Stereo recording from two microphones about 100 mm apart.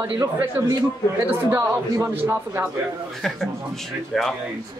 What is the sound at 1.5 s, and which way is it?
Speech, 35° right (ahead or behind).